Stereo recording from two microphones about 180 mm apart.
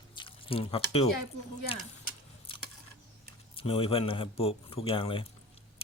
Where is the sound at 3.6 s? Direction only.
30° left (ahead or behind).